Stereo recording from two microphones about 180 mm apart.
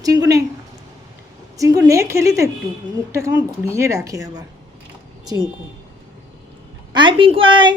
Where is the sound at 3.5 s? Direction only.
15° right (ahead or behind).